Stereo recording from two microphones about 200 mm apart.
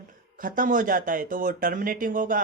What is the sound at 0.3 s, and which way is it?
Speech, 45° right (ahead or behind).